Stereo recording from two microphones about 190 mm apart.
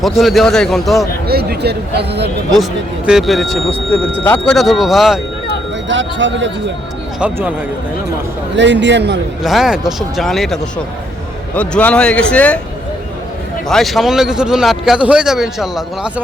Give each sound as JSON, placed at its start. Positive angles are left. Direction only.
{"t": 0.0, "sound": "a man's voice", "side_deg": 0}
{"t": 1.3, "sound": "speech", "side_deg": -55}
{"t": 3.1, "sound": "a man's voice", "side_deg": 0}
{"t": 5.9, "sound": "a man's voice", "side_deg": -75}
{"t": 7.2, "sound": "speech", "side_deg": -10}
{"t": 8.5, "sound": "a man's voice", "side_deg": -70}
{"t": 9.4, "sound": "a man's voice", "side_deg": 0}
{"t": 13.7, "sound": "a man's voice", "side_deg": 0}